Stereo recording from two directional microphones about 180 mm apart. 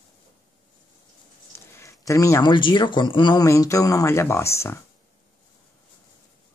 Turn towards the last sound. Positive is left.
turn(degrees=15)  # may be behind; listen again after turning